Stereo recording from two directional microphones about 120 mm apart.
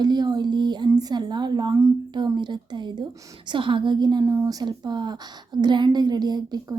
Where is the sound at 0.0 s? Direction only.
35° right (ahead or behind).